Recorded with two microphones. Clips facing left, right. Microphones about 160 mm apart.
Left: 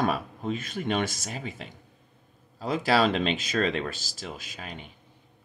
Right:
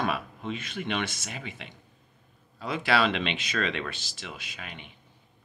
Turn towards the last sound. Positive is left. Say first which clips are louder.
# left 3 dB
turn(degrees=40)  # may be behind; listen again after turning